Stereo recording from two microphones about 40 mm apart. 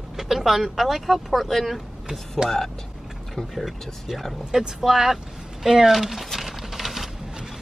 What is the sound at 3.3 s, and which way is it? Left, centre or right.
Speech, centre.